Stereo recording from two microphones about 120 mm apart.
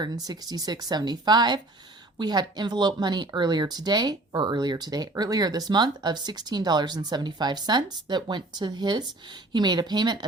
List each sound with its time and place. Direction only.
0.3 s speech: 30° right (ahead or behind)